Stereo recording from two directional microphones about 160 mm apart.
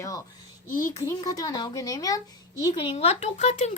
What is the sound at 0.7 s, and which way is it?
Speech, 55° left (ahead or behind).